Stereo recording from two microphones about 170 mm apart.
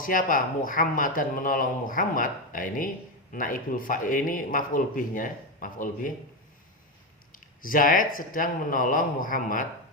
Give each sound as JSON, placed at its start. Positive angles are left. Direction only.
{"t": 0.0, "sound": "speech", "side_deg": 55}
{"t": 7.3, "sound": "speech", "side_deg": 55}